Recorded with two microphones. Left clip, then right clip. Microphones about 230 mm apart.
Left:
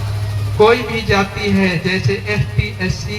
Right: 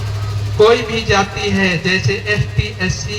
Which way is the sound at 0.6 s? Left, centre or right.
Right.